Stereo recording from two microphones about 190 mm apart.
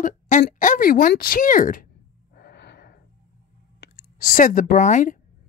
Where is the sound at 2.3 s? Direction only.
60° left (ahead or behind).